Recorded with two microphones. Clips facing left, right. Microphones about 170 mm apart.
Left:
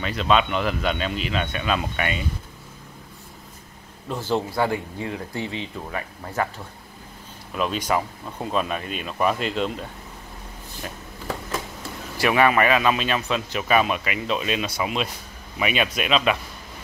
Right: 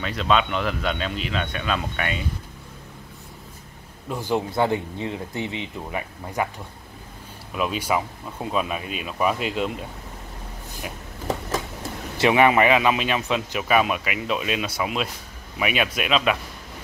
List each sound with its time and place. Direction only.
0.0 s speech: centre (ahead or behind)
4.1 s speech: 15° right (ahead or behind)
7.5 s speech: 5° right (ahead or behind)
12.2 s speech: 20° right (ahead or behind); by 16.3 s 5° right (ahead or behind)